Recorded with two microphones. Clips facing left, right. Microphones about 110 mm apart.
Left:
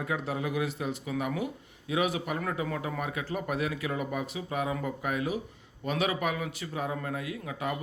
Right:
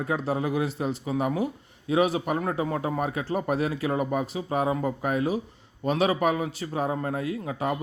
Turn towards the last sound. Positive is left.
turn(degrees=-35)  # may be behind; listen again after turning